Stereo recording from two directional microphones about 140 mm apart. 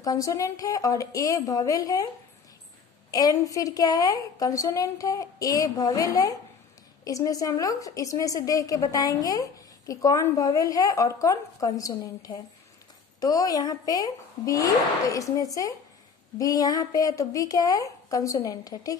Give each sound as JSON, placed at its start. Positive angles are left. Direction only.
{"t": 0.0, "sound": "a woman's voice", "side_deg": 25}
{"t": 3.1, "sound": "a woman's voice", "side_deg": 25}
{"t": 7.1, "sound": "a woman's voice", "side_deg": 25}